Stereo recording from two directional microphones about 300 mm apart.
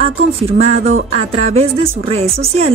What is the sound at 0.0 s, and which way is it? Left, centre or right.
Speech, centre.